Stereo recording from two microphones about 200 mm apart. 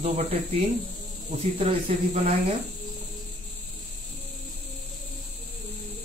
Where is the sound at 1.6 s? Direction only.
35° right (ahead or behind).